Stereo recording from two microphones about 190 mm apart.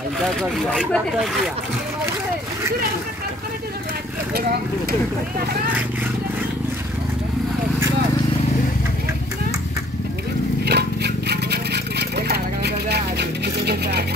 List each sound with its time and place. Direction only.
0.2 s speech: centre (ahead or behind)
4.3 s speech: 55° right (ahead or behind)
10.6 s a sound: 60° right (ahead or behind)